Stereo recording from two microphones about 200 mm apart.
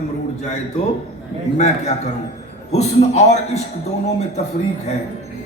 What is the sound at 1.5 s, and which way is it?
Accordion, 35° left (ahead or behind).